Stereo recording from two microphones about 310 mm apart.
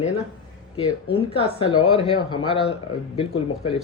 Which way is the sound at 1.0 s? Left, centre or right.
Centre.